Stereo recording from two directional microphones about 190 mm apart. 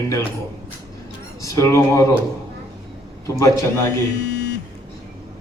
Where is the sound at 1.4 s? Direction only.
15° left (ahead or behind).